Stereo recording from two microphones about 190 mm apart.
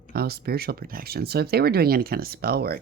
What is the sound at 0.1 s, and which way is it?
Speech, 55° right (ahead or behind).